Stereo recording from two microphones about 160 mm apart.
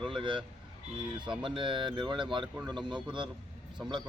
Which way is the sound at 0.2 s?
30° right (ahead or behind).